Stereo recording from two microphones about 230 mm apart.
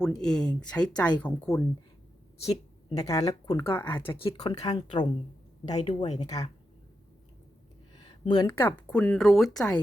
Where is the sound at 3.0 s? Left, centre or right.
Centre.